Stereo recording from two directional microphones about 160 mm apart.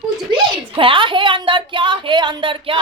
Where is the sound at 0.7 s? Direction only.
30° right (ahead or behind).